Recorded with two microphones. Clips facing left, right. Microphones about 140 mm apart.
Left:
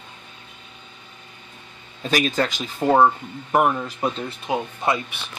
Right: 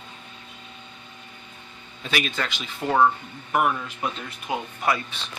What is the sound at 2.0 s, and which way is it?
Speech, 40° left (ahead or behind).